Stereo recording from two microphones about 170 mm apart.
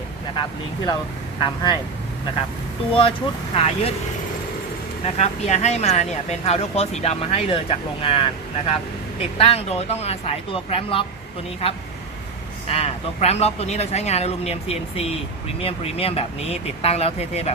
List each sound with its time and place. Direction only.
1.4 s speech: 30° left (ahead or behind)
2.9 s speech: 30° left (ahead or behind)
5.0 s speech: 40° left (ahead or behind)
12.6 s speech: 35° left (ahead or behind)